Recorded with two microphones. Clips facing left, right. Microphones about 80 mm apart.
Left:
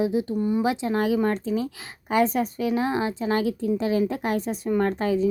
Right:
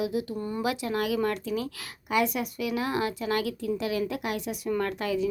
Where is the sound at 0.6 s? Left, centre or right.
Left.